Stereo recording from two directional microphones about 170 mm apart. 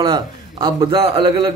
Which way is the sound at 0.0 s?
25° right (ahead or behind).